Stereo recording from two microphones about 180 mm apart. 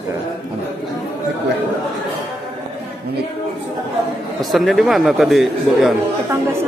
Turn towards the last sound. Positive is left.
turn(degrees=0)  # may be behind; listen again after turning